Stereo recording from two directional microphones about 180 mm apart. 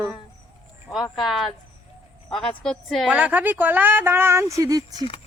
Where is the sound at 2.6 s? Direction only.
Centre (ahead or behind); by 4.8 s 20° right (ahead or behind).